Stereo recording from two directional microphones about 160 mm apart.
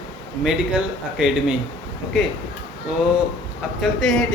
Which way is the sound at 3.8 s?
Centre (ahead or behind).